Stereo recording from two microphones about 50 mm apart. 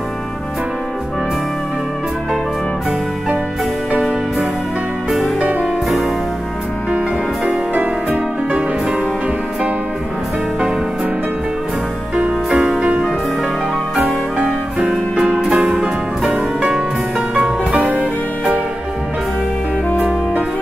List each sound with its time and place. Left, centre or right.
5.6 s music: centre
7.7 s music: right
14.0 s music: centre